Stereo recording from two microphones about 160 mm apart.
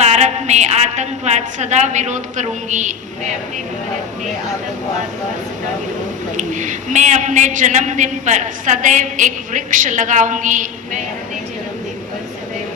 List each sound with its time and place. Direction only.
0.0 s a woman's voice: 45° right (ahead or behind)
6.3 s a man's voice: 50° right (ahead or behind)